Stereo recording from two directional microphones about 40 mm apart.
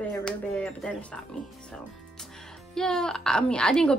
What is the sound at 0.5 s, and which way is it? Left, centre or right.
Speech, left.